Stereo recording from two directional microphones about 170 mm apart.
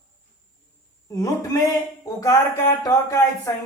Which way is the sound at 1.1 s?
20° left (ahead or behind).